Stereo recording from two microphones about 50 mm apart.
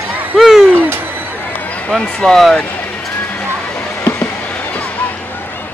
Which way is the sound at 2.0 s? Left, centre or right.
Centre.